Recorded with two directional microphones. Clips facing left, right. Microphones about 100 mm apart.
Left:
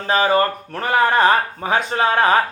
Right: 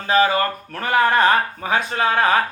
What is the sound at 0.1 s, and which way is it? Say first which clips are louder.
Speech: left 1 dB; 25° left (ahead or behind).